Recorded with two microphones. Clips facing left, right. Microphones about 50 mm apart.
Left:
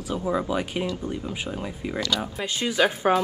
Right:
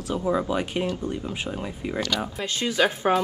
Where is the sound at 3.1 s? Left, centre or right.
Centre.